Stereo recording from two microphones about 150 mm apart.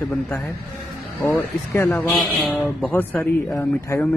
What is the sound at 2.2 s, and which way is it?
Speech, centre (ahead or behind).